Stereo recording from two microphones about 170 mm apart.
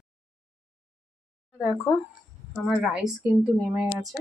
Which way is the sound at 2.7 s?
5° right (ahead or behind).